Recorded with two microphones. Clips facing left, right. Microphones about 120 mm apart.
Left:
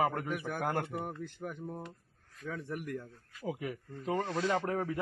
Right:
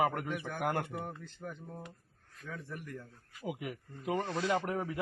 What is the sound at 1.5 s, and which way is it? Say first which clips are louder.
Speech: left 1 dB; 15° left (ahead or behind).